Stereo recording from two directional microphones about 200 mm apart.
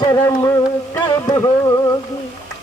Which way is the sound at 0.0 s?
15° left (ahead or behind).